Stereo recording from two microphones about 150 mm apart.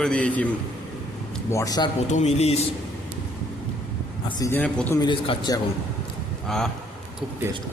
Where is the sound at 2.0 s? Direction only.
50° left (ahead or behind).